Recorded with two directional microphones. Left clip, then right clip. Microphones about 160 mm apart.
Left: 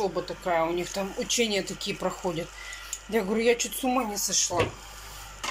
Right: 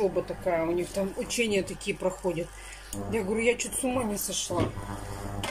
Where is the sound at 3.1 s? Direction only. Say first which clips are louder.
Left 3 dB; 20° right (ahead or behind).